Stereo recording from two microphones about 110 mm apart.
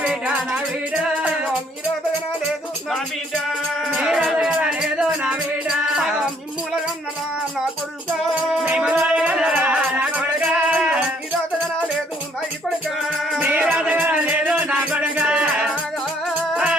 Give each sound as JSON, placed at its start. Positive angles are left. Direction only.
{"t": 0.1, "sound": "music", "side_deg": -5}
{"t": 3.8, "sound": "music", "side_deg": -5}
{"t": 8.6, "sound": "music", "side_deg": -5}
{"t": 13.0, "sound": "music", "side_deg": 0}
{"t": 13.4, "sound": "music", "side_deg": -15}